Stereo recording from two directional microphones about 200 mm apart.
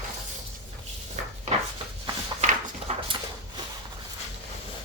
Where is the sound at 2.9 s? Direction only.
35° right (ahead or behind).